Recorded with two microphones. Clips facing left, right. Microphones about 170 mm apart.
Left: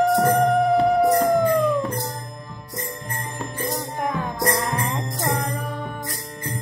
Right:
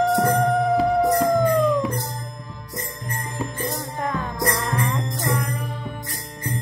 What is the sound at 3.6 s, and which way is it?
Music, 15° left (ahead or behind).